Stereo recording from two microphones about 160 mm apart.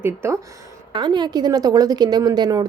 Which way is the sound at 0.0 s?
15° right (ahead or behind).